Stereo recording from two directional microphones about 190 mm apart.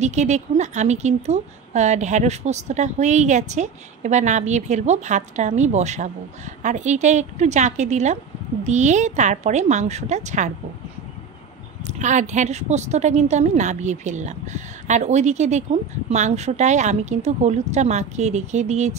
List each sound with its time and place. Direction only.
0.0 s a woman's voice: 35° right (ahead or behind)
11.9 s a woman's voice: 40° right (ahead or behind)